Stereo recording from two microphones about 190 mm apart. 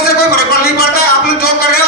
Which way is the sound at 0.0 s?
55° left (ahead or behind).